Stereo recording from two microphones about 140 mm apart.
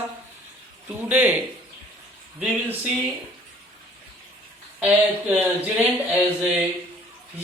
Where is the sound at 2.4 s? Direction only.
5° right (ahead or behind).